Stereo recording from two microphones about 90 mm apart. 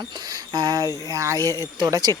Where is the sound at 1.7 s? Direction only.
45° right (ahead or behind).